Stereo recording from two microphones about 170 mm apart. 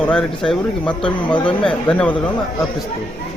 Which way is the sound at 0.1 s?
5° left (ahead or behind).